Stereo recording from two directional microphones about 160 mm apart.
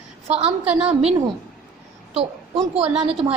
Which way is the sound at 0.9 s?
40° right (ahead or behind).